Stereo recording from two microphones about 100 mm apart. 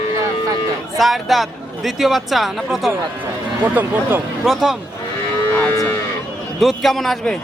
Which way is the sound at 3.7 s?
20° right (ahead or behind).